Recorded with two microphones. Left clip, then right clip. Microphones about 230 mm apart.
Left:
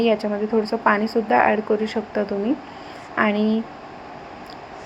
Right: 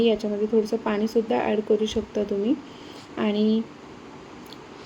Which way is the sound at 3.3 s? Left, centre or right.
Left.